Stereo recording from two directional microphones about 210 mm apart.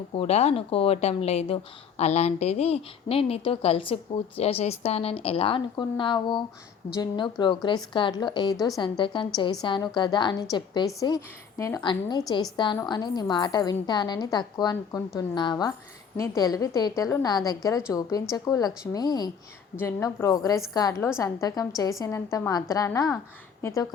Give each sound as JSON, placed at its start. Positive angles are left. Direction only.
{"t": 0.2, "sound": "a woman's voice", "side_deg": 30}